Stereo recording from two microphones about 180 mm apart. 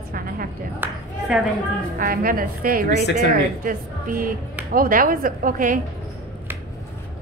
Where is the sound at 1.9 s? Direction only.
50° right (ahead or behind).